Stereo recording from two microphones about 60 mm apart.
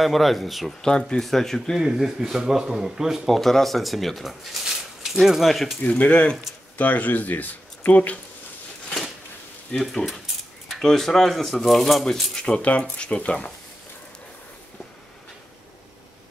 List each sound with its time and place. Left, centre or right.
0.0 s speech: centre
0.8 s speech: centre
1.8 s speech: centre
3.3 s speech: centre
5.9 s speech: left
9.8 s speech: centre
12.4 s speech: centre